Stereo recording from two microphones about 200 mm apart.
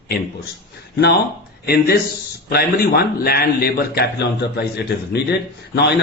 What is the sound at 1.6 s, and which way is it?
A man's voice, 50° left (ahead or behind).